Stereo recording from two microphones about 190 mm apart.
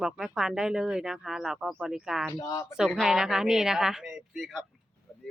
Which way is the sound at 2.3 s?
15° left (ahead or behind).